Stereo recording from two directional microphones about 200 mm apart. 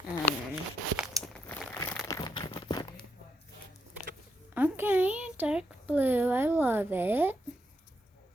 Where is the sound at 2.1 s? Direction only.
20° left (ahead or behind).